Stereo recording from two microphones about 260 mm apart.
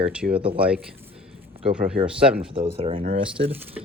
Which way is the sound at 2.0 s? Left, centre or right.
Centre.